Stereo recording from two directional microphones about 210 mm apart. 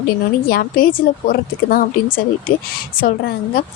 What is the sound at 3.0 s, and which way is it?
Speech, 45° left (ahead or behind).